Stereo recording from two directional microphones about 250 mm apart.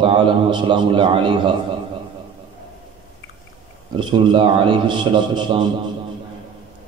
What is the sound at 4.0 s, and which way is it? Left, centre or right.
A man's voice, centre.